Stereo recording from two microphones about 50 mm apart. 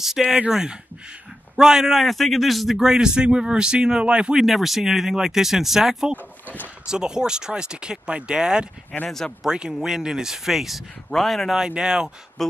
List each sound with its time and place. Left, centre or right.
0.2 s speech: centre
2.8 s speech: centre
4.4 s speech: centre
6.4 s speech: left
6.9 s speech: centre
8.9 s speech: centre
9.4 s speech: centre
11.5 s speech: centre
12.4 s speech: centre